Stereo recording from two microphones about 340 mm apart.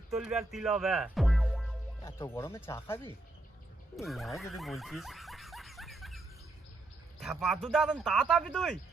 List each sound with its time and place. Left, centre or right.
0.1 s speech: centre
3.9 s snicker: centre
7.2 s speech: centre